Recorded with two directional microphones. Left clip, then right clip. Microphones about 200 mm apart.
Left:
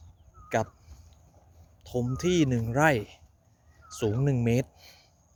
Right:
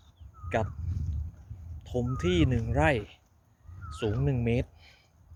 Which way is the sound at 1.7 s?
20° left (ahead or behind).